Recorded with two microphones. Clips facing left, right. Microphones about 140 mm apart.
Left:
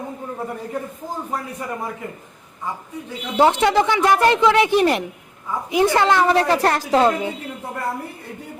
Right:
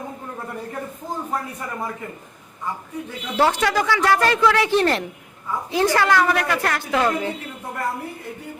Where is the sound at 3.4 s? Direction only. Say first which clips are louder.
Left 4 dB; 20° left (ahead or behind).